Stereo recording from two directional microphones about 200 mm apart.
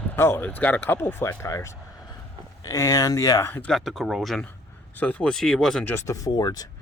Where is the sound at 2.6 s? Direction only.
15° left (ahead or behind).